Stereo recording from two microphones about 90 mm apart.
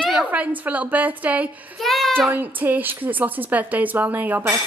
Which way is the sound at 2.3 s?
20° right (ahead or behind).